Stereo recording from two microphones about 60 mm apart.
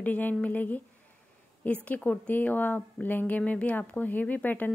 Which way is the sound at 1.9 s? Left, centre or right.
Left.